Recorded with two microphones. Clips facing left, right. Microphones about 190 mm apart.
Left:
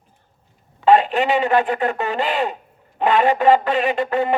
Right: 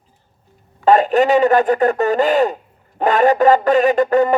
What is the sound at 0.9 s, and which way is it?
Speech, 45° right (ahead or behind).